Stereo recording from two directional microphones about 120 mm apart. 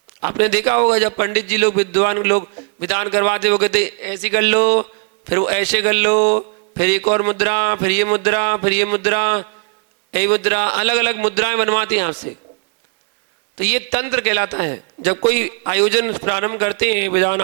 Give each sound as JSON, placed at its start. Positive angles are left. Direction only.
{"t": 0.2, "sound": "speech", "side_deg": 25}
{"t": 13.6, "sound": "speech", "side_deg": 20}